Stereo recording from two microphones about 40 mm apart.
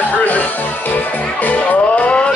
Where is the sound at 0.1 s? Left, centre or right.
Left.